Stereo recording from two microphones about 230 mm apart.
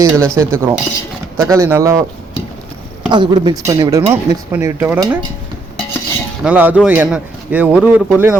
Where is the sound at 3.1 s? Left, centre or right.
Centre.